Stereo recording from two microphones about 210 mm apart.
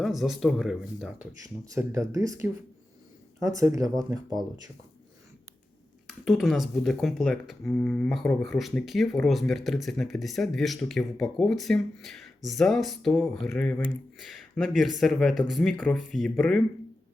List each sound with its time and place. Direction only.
0.0 s speech: centre (ahead or behind)
1.7 s speech: 15° right (ahead or behind)
6.1 s speech: centre (ahead or behind)